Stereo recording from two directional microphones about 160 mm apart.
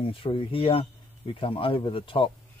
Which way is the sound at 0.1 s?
30° left (ahead or behind).